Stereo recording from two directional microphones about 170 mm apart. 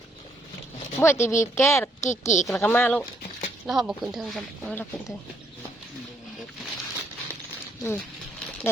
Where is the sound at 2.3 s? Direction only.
45° left (ahead or behind).